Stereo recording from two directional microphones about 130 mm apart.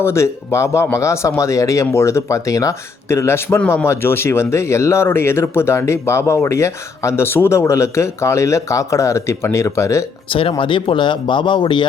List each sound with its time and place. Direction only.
0.0 s speech: 20° left (ahead or behind)
10.2 s speech: 45° left (ahead or behind)